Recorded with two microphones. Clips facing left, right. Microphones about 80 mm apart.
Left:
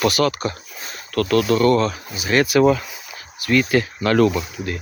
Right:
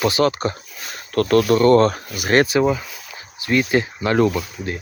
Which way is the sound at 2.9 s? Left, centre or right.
Centre.